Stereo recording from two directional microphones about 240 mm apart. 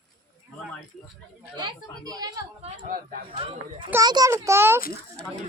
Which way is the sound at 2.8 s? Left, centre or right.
Right.